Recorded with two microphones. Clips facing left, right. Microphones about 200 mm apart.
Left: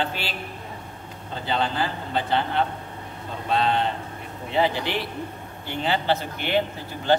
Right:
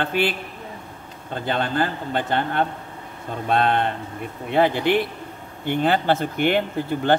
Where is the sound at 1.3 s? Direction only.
50° right (ahead or behind).